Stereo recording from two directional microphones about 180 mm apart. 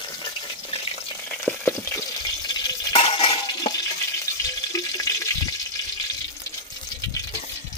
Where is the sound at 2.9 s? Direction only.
30° left (ahead or behind).